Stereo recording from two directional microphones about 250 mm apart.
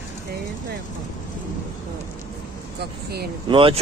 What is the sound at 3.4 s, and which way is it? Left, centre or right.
Speech, right.